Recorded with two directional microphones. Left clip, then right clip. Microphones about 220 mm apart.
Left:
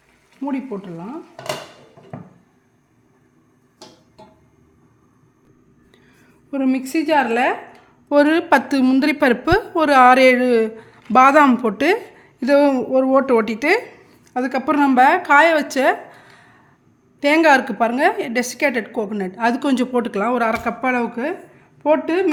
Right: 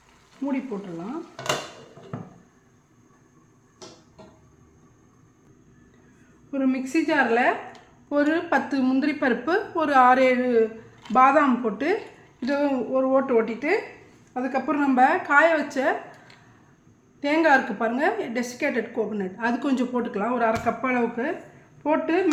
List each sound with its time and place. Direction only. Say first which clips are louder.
0.4 s a woman's voice: left 4 dB; 45° left (ahead or behind)
6.5 s a woman's voice: left 4 dB; 45° left (ahead or behind)
17.2 s a woman's voice: left 6 dB; 50° left (ahead or behind)